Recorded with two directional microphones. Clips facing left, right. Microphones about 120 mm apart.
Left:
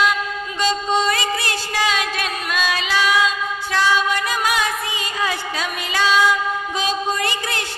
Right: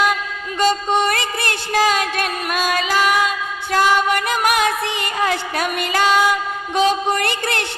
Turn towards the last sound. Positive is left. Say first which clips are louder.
# right 3 dB
turn(degrees=-60)  # may be behind; listen again after turning